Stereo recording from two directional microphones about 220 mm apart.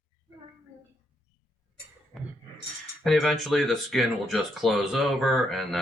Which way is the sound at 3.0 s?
Centre (ahead or behind).